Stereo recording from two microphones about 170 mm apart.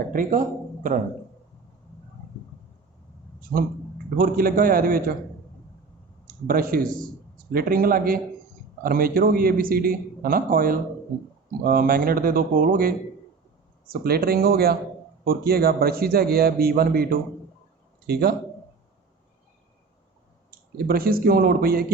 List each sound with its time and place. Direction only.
0.1 s speech: 55° right (ahead or behind)
4.2 s a man's voice: 55° right (ahead or behind)
6.2 s a man's voice: 55° right (ahead or behind)
20.5 s a man's voice: 60° right (ahead or behind)